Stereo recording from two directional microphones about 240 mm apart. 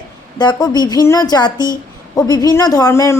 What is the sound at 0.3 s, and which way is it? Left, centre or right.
A woman's voice, centre.